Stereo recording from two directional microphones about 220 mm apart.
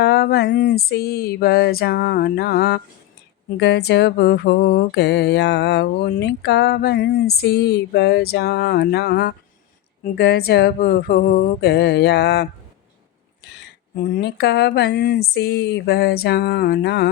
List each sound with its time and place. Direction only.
0.0 s music: 45° left (ahead or behind)
13.6 s music: 40° left (ahead or behind)